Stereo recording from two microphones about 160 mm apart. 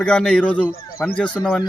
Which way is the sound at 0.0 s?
5° left (ahead or behind).